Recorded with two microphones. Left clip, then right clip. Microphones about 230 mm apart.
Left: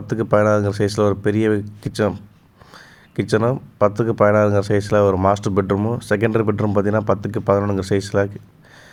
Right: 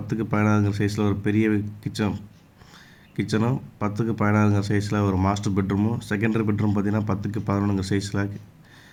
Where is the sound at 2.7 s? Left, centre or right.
Centre.